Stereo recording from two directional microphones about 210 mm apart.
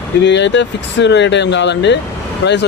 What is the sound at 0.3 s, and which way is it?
Speech, 55° left (ahead or behind).